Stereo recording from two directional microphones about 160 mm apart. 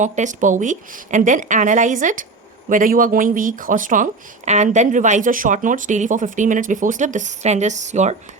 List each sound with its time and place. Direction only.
0.0 s speech: 50° right (ahead or behind)